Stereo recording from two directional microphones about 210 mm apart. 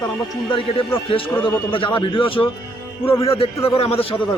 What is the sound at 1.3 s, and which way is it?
Speech, 10° left (ahead or behind).